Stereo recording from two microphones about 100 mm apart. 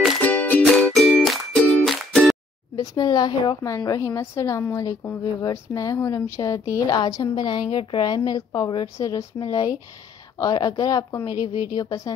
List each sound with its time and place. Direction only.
0.2 s music: 15° left (ahead or behind)
0.7 s music: 5° left (ahead or behind)
2.8 s a woman's voice: 40° left (ahead or behind)
8.2 s a woman's voice: 35° left (ahead or behind)